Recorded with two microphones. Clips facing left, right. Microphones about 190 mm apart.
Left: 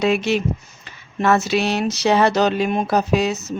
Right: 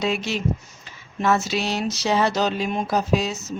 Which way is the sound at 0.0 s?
65° left (ahead or behind).